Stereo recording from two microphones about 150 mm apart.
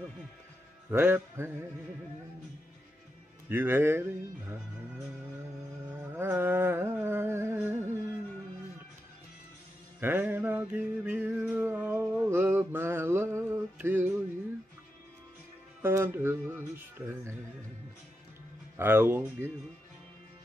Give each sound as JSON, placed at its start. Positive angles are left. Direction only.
{"t": 0.8, "sound": "music", "side_deg": -15}
{"t": 3.4, "sound": "music", "side_deg": -15}
{"t": 5.9, "sound": "a sound", "side_deg": -15}
{"t": 9.9, "sound": "music", "side_deg": -15}
{"t": 15.8, "sound": "music", "side_deg": -15}
{"t": 18.8, "sound": "music", "side_deg": -15}